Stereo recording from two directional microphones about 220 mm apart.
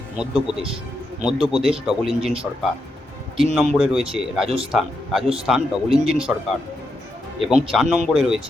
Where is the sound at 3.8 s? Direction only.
5° right (ahead or behind).